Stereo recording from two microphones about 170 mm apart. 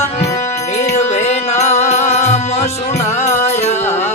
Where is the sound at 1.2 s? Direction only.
40° left (ahead or behind).